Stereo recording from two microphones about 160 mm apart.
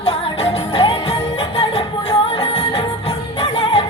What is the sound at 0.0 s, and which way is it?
Music, 40° left (ahead or behind).